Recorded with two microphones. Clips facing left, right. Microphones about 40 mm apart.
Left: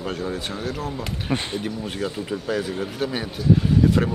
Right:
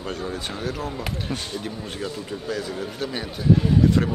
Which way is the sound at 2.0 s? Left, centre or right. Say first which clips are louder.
Left 3 dB; centre.